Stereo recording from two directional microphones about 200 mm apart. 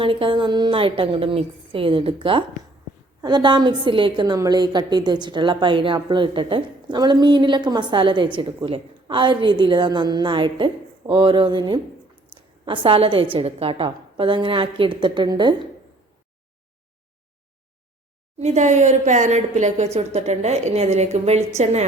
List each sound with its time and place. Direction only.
0.0 s a woman's voice: 25° right (ahead or behind)
12.3 s a sound: 25° right (ahead or behind)
13.3 s a woman's voice: 30° right (ahead or behind)
18.3 s a woman's voice: 35° right (ahead or behind)